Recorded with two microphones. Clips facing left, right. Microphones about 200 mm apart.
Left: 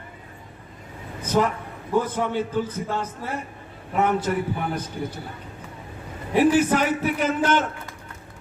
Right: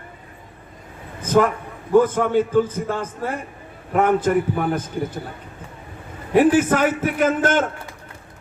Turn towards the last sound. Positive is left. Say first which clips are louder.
# right 3 dB
turn(degrees=-50)  # may be behind; listen again after turning